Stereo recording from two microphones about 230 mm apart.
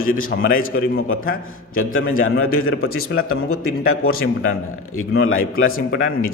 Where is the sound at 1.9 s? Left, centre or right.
Left.